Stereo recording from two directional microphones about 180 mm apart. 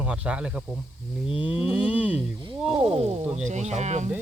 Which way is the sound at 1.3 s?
5° right (ahead or behind).